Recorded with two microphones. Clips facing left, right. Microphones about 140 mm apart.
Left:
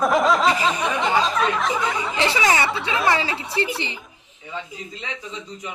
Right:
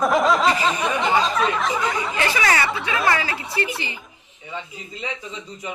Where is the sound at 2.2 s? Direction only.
20° left (ahead or behind).